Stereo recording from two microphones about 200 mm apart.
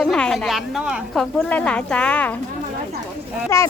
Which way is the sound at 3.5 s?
15° left (ahead or behind).